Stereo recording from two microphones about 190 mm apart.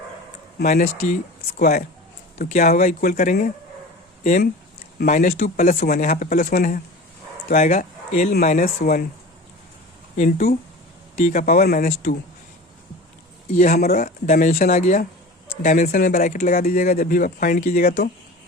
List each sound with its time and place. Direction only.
0.6 s speech: 40° left (ahead or behind)
1.4 s speech: 50° left (ahead or behind)
10.2 s speech: 45° left (ahead or behind)
13.7 s speech: 50° left (ahead or behind)